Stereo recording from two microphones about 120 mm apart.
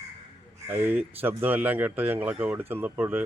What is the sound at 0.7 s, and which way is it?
Speech, 15° right (ahead or behind).